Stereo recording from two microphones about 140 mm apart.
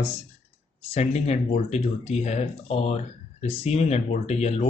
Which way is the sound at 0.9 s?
50° left (ahead or behind).